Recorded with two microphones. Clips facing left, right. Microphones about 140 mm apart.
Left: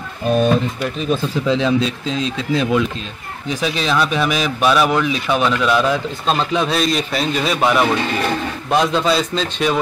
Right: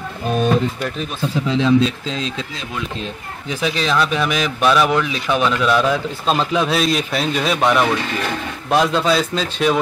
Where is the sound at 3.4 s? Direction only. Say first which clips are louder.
Even; centre (ahead or behind).